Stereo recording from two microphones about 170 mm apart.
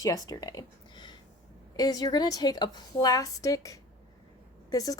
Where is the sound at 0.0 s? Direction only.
20° left (ahead or behind).